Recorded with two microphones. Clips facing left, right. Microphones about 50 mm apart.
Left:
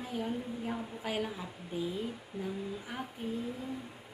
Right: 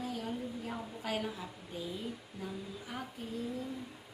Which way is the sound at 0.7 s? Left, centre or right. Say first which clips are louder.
Left 2 dB; centre.